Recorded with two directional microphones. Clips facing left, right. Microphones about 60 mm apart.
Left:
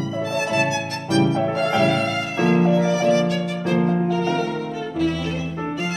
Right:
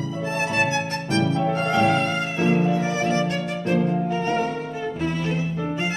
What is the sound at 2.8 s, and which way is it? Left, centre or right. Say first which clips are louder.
Violin: left 5 dB; right.